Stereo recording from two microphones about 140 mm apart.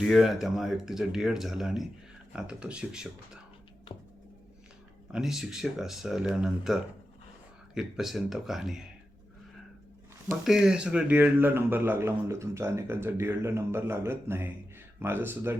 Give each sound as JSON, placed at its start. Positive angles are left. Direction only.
{"t": 0.0, "sound": "speech", "side_deg": 0}
{"t": 5.1, "sound": "speech", "side_deg": -5}
{"t": 10.4, "sound": "speech", "side_deg": -5}